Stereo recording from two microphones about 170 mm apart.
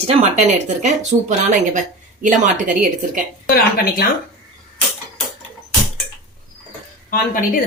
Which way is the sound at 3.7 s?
60° left (ahead or behind).